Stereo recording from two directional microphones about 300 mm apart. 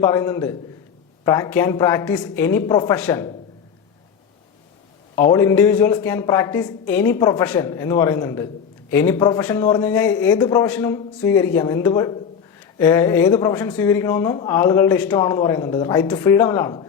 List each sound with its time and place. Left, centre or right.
0.0 s speech: centre
5.1 s speech: centre